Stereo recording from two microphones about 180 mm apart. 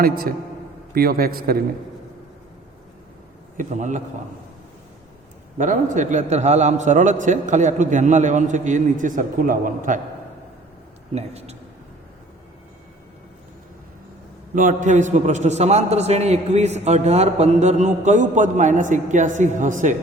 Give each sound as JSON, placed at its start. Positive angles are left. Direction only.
{"t": 0.0, "sound": "a man's voice", "side_deg": -55}
{"t": 3.6, "sound": "a man's voice", "side_deg": -40}
{"t": 5.5, "sound": "a man's voice", "side_deg": -45}
{"t": 11.1, "sound": "a man's voice", "side_deg": -35}
{"t": 14.5, "sound": "a man's voice", "side_deg": -45}